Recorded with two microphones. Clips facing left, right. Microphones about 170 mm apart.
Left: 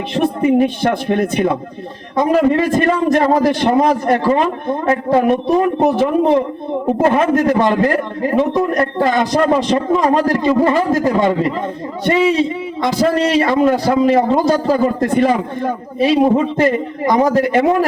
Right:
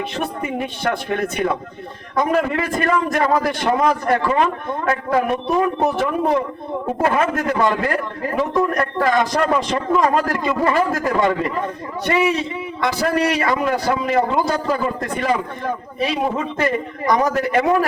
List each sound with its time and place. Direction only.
0.1 s a man's voice: 35° left (ahead or behind)
12.8 s a man's voice: 30° left (ahead or behind)